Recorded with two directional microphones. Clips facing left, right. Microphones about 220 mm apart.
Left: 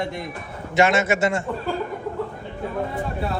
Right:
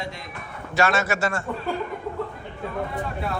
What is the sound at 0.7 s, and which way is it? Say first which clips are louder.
Speech: left 4 dB; 20° left (ahead or behind).